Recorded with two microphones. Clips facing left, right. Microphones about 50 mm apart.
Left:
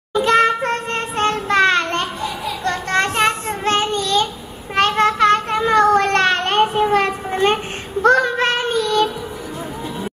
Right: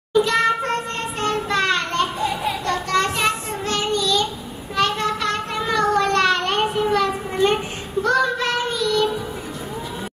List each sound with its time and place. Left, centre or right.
0.2 s child singing: left
4.7 s a sound: left
8.0 s child singing: left